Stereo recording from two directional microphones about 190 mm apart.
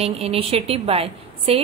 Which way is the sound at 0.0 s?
30° right (ahead or behind).